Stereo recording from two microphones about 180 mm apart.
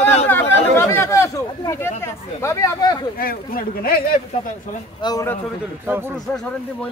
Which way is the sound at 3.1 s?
55° left (ahead or behind).